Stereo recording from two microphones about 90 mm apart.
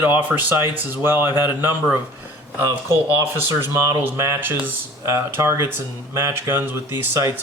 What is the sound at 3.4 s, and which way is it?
Speech, 25° right (ahead or behind).